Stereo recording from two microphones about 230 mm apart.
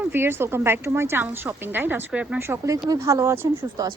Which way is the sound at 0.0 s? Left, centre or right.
Centre.